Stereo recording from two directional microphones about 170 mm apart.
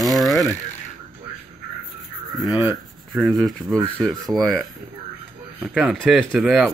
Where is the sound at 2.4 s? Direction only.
25° left (ahead or behind).